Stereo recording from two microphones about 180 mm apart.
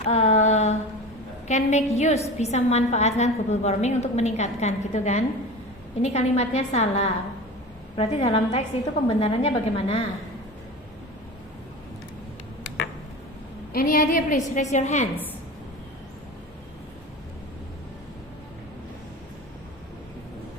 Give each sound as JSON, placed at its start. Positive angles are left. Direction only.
{"t": 0.0, "sound": "a sound", "side_deg": 35}
{"t": 1.5, "sound": "a woman's voice", "side_deg": 40}
{"t": 13.7, "sound": "a woman's voice", "side_deg": 50}